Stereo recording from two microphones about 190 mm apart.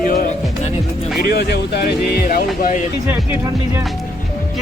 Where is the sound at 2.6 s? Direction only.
45° left (ahead or behind).